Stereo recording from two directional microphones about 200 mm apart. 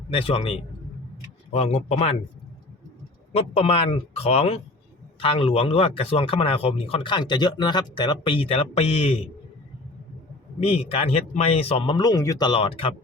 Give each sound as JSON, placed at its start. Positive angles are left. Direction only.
{"t": 0.1, "sound": "speech", "side_deg": 25}
{"t": 1.5, "sound": "speech", "side_deg": 30}
{"t": 3.3, "sound": "speech", "side_deg": 30}
{"t": 10.6, "sound": "speech", "side_deg": 30}